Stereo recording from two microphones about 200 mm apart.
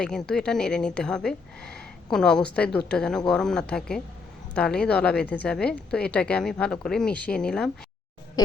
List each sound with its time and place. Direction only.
0.0 s a woman's voice: 5° left (ahead or behind)